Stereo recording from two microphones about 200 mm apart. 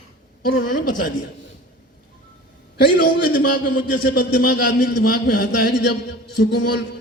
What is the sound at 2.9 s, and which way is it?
A man's voice, 50° left (ahead or behind).